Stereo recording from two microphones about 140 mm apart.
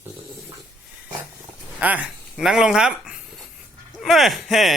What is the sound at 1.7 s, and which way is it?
Speech, 10° right (ahead or behind).